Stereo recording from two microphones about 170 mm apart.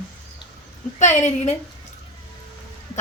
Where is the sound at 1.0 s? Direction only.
45° left (ahead or behind).